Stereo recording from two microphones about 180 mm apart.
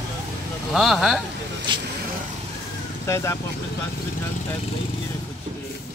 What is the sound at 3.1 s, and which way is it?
Speech, 15° left (ahead or behind).